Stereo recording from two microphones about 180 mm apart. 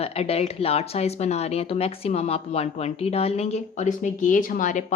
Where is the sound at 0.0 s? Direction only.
35° left (ahead or behind).